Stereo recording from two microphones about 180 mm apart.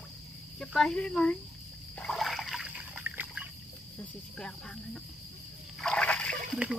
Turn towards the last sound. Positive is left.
turn(degrees=5)  # may be behind; listen again after turning